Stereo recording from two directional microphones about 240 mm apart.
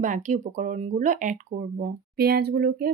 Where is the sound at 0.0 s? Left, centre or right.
Right.